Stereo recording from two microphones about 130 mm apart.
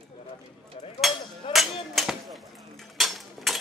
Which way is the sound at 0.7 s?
50° left (ahead or behind).